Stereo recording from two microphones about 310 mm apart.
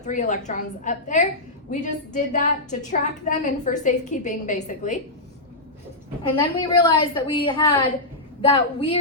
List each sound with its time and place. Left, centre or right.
0.0 s a woman's voice: left
6.5 s a woman's voice: centre